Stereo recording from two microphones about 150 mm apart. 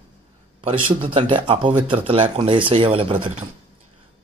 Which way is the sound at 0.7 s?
35° right (ahead or behind).